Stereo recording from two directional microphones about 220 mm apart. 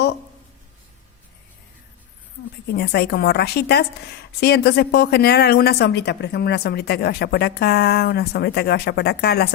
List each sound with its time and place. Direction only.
2.7 s a woman's voice: 45° left (ahead or behind)